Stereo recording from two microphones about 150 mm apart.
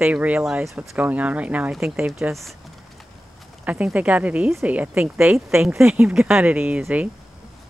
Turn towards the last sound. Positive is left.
turn(degrees=-10)  # may be behind; listen again after turning